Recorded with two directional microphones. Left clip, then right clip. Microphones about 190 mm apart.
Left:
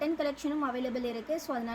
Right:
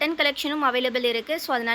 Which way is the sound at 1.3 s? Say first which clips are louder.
Right 9 dB; 20° right (ahead or behind).